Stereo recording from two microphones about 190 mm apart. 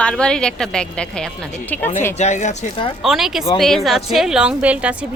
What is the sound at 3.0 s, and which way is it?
A woman's voice, centre (ahead or behind).